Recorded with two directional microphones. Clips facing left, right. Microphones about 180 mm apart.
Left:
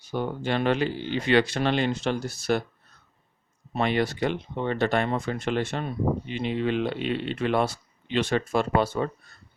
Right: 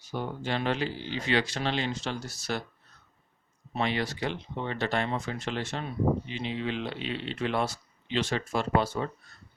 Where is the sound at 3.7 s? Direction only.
55° left (ahead or behind).